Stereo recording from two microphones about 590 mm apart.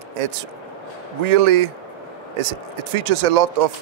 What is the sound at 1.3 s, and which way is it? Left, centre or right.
Speech, right.